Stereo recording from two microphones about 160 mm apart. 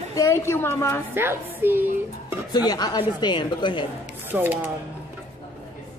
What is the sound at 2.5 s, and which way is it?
A woman's voice, 25° left (ahead or behind).